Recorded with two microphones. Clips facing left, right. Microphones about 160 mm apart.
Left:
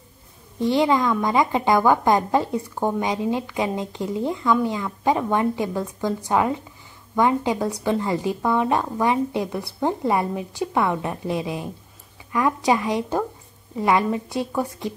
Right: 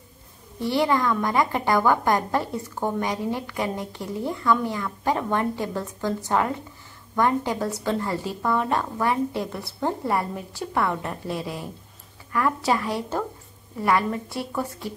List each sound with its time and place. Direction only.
0.6 s a woman's voice: 20° left (ahead or behind)